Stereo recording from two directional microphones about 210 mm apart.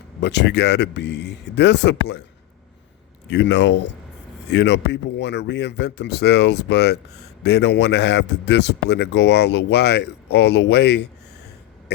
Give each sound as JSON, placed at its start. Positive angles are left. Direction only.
{"t": 0.2, "sound": "speech", "side_deg": 55}
{"t": 3.2, "sound": "speech", "side_deg": 55}
{"t": 11.9, "sound": "a sound", "side_deg": 55}